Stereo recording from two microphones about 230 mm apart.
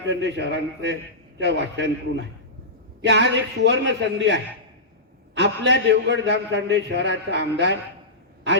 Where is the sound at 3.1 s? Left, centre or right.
Right.